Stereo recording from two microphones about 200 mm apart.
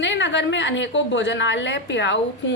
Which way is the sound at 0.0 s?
65° left (ahead or behind).